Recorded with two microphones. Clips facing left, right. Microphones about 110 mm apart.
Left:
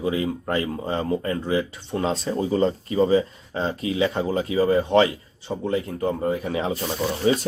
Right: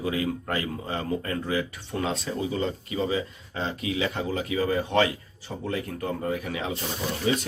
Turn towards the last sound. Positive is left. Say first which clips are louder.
# left 5 dB
turn(degrees=35)  # may be behind; listen again after turning